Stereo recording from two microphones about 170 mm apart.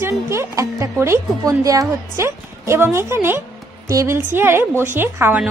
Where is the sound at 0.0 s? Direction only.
15° right (ahead or behind).